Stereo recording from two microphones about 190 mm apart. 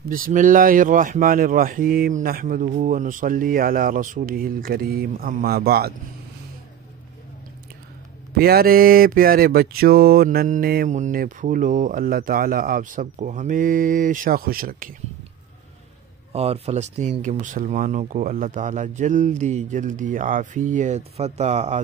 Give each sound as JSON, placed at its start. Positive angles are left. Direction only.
{"t": 0.0, "sound": "mantra", "side_deg": -45}
{"t": 8.4, "sound": "mantra", "side_deg": -55}
{"t": 16.3, "sound": "speech", "side_deg": -30}